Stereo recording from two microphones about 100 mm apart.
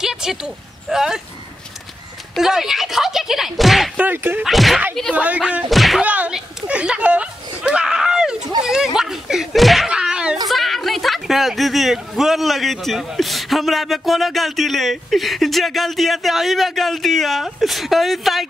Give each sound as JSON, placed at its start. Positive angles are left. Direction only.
{"t": 0.0, "sound": "a sound", "side_deg": -5}
{"t": 0.8, "sound": "speech", "side_deg": -5}
{"t": 2.3, "sound": "speech", "side_deg": -5}
{"t": 3.9, "sound": "whip", "side_deg": -15}
{"t": 4.4, "sound": "speech", "side_deg": 0}
{"t": 5.1, "sound": "speech", "side_deg": -15}
{"t": 5.7, "sound": "speech", "side_deg": 0}
{"t": 6.0, "sound": "speech", "side_deg": -15}